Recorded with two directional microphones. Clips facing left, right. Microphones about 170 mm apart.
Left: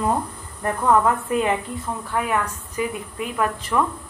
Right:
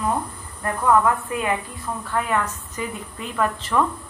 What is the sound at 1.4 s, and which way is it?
Speech, 20° left (ahead or behind).